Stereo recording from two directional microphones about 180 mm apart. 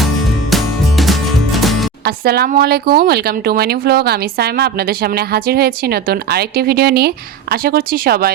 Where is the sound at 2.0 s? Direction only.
60° right (ahead or behind).